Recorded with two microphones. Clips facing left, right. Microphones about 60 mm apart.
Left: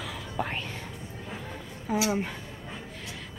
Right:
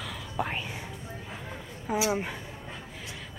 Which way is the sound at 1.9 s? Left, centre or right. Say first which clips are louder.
Left 1 dB; centre.